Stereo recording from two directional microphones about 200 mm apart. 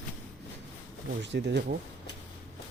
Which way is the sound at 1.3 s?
60° right (ahead or behind).